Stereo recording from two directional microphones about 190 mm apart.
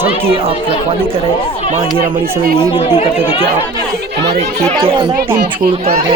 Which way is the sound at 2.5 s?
25° left (ahead or behind).